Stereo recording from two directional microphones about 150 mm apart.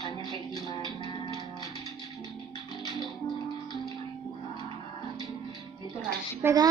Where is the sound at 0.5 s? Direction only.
30° left (ahead or behind).